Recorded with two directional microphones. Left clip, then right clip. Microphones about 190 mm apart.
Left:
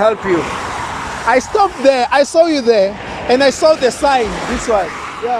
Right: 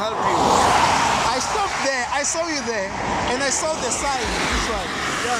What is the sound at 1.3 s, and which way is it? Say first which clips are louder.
Speech: left 9 dB; 65° left (ahead or behind).